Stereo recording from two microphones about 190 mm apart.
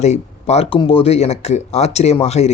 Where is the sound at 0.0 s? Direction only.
35° left (ahead or behind).